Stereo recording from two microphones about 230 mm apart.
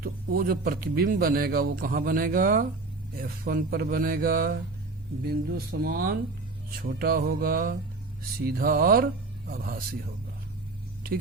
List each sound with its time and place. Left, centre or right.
0.0 s speech: right